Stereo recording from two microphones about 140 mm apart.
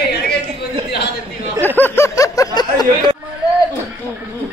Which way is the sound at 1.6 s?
15° left (ahead or behind).